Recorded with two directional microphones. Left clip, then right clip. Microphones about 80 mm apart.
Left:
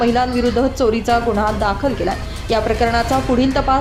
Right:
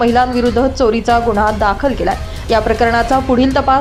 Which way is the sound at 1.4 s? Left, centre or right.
Right.